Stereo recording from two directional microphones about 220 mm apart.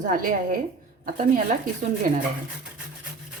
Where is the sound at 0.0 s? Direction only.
35° right (ahead or behind).